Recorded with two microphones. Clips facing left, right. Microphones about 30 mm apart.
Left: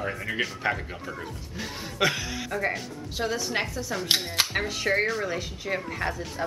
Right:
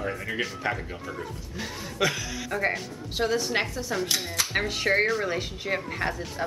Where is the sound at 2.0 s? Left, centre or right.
Centre.